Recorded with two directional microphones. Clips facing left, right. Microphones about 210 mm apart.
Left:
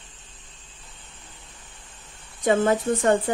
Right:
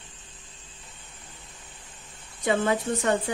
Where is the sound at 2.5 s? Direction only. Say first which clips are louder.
Left 4 dB; 45° left (ahead or behind).